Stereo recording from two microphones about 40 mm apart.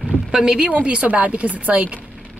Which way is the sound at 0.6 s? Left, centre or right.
Right.